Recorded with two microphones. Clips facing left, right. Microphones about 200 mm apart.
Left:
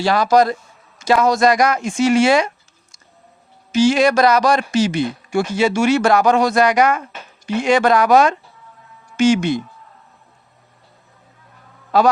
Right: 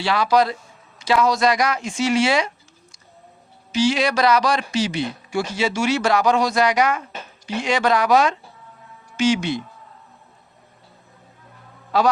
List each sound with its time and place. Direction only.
0.0 s speech: 45° left (ahead or behind)
3.7 s speech: 50° left (ahead or behind)